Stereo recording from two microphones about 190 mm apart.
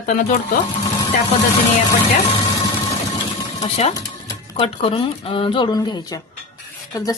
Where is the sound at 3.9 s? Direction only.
20° left (ahead or behind).